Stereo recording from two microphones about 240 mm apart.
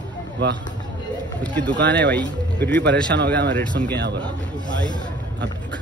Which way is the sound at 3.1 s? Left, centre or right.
Right.